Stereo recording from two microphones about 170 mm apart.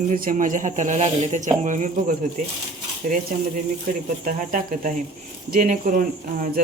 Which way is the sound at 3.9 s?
55° right (ahead or behind).